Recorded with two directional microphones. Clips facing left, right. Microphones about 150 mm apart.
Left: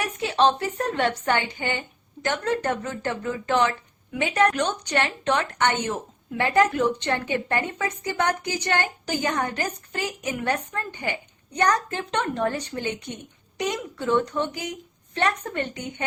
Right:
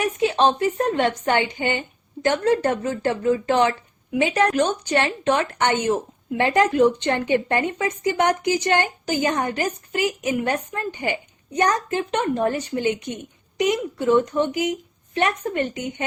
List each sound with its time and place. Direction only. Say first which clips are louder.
0.2 s a woman's voice: right 1 dB; 15° right (ahead or behind)